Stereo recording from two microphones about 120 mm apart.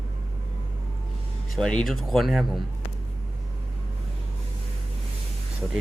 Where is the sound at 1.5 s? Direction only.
5° left (ahead or behind).